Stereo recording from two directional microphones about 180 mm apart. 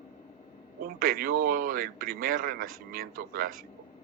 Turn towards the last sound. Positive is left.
turn(degrees=-50)  # may be behind; listen again after turning